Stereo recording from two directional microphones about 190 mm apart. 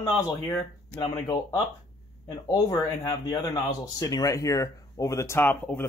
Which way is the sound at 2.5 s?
20° left (ahead or behind).